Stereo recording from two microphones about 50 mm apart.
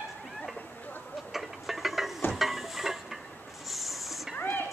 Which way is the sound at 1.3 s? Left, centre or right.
Centre.